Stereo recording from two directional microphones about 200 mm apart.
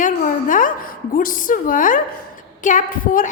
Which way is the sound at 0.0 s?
40° left (ahead or behind).